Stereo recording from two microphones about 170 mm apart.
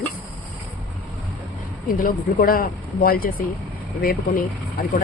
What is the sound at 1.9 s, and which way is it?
Speech, 55° left (ahead or behind).